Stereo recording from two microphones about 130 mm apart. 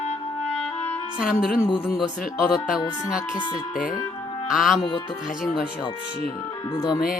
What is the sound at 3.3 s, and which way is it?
Speech, 90° left.